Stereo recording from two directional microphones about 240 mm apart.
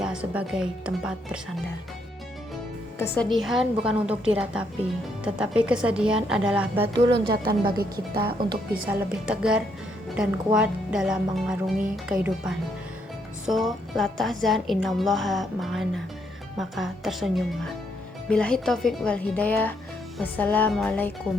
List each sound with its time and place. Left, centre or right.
0.0 s speech: centre
3.0 s speech: centre
7.3 s speech: centre
8.9 s speech: centre